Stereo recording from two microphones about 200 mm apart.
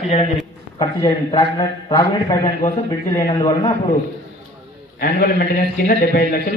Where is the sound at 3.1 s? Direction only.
15° left (ahead or behind).